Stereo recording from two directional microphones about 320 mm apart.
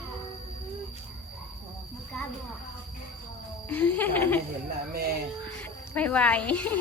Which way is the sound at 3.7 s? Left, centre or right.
Centre.